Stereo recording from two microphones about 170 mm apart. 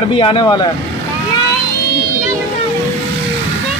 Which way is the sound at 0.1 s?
30° left (ahead or behind).